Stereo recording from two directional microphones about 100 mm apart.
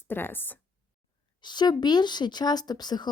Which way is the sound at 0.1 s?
20° left (ahead or behind).